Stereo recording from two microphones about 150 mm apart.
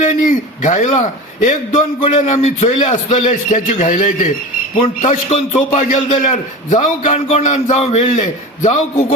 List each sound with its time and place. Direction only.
0.0 s a man's voice: 55° left (ahead or behind)